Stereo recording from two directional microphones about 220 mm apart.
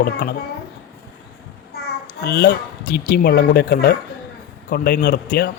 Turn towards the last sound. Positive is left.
turn(degrees=50)  # may be behind; listen again after turning